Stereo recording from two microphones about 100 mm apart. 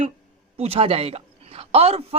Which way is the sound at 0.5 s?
80° right.